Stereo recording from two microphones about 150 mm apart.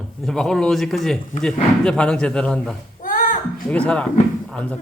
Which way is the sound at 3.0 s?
65° left (ahead or behind).